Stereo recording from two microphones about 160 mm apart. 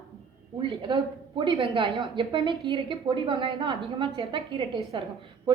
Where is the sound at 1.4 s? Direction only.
30° right (ahead or behind).